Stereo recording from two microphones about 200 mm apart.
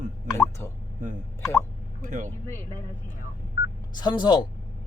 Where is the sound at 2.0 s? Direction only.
40° right (ahead or behind).